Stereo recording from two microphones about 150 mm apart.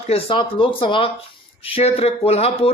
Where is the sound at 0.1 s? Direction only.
35° left (ahead or behind).